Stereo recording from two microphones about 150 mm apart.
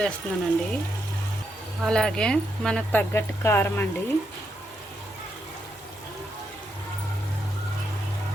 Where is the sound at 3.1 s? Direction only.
15° left (ahead or behind).